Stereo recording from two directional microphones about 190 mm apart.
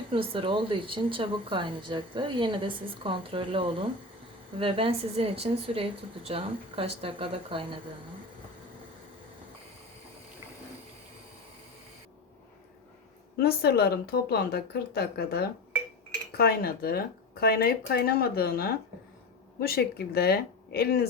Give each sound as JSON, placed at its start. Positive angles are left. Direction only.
{"t": 0.1, "sound": "a woman's voice", "side_deg": -25}
{"t": 13.3, "sound": "speech", "side_deg": 55}